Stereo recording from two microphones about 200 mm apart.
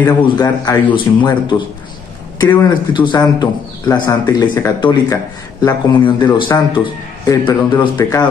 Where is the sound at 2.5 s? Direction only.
20° left (ahead or behind).